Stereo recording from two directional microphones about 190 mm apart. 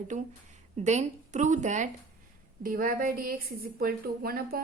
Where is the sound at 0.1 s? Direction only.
40° right (ahead or behind).